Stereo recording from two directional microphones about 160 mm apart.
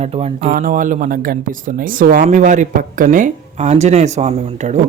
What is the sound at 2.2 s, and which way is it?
Speech, 50° right (ahead or behind).